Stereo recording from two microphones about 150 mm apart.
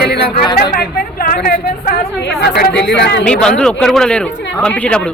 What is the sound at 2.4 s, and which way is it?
Speech, 90° left.